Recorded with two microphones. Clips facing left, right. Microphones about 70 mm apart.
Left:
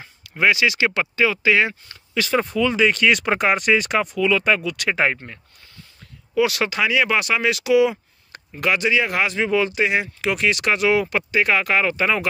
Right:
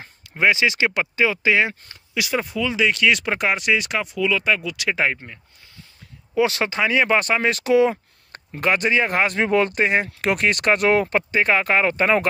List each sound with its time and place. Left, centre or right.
0.3 s speech: right
2.3 s speech: centre
6.3 s speech: right